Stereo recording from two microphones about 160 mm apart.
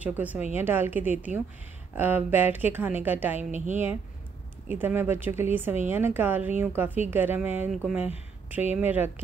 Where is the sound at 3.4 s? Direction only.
50° right (ahead or behind).